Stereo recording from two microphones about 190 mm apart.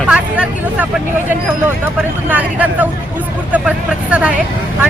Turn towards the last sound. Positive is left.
turn(degrees=-5)  # may be behind; listen again after turning